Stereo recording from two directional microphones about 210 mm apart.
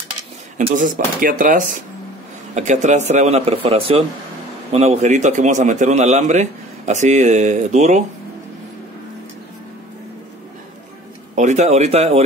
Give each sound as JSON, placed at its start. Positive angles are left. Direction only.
{"t": 0.6, "sound": "a man's voice", "side_deg": -35}
{"t": 11.3, "sound": "a man's voice", "side_deg": -35}